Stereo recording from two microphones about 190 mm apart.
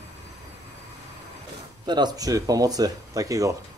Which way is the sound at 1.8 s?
25° right (ahead or behind).